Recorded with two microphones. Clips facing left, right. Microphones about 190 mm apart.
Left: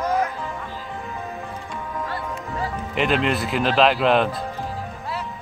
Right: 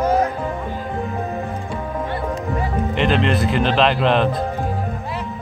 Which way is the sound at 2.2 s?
50° right (ahead or behind).